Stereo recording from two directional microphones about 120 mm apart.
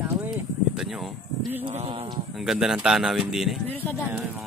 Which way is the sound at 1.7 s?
55° right (ahead or behind).